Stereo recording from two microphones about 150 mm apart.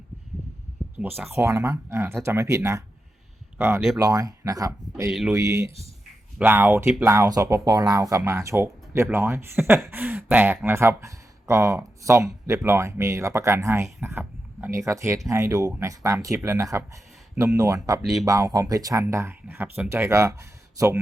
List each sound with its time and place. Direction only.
0.8 s a sound: 10° right (ahead or behind)
1.3 s speech: 20° right (ahead or behind)
3.9 s speech: 25° right (ahead or behind)